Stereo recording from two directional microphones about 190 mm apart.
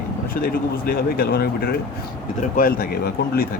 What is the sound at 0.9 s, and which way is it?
Speech, 55° left (ahead or behind).